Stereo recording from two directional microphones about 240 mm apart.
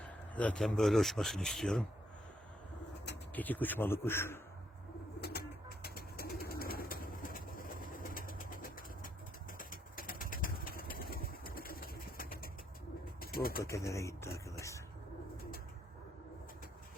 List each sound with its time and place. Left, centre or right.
0.0 s a man's voice: centre
3.3 s a man's voice: centre
5.2 s bird: left
9.5 s vehicle: left
13.1 s bird: left
13.7 s a man's voice: centre
14.3 s a sound: left